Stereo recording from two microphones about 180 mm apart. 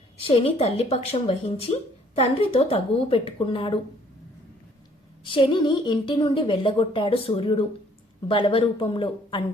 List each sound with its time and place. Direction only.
0.3 s a woman's voice: 35° left (ahead or behind)
5.2 s a woman's voice: 30° left (ahead or behind)